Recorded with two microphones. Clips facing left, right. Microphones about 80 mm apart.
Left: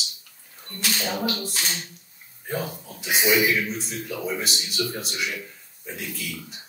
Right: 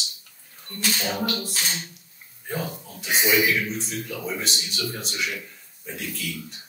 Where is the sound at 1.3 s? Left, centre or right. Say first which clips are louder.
Right 1 dB; centre.